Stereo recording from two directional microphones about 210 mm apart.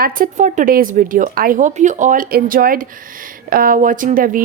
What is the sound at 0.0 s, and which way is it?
A woman's voice, 40° right (ahead or behind).